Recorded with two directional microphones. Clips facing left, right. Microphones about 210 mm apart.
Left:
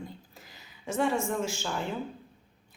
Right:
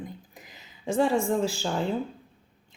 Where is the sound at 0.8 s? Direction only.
30° right (ahead or behind).